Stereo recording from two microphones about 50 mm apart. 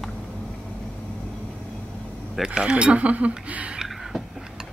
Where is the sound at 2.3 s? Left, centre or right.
Centre; by 3.7 s right.